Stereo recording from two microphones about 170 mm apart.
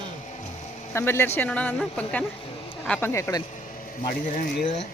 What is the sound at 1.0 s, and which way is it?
Speech, 15° left (ahead or behind).